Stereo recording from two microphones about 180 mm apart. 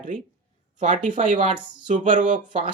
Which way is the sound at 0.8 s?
45° right (ahead or behind).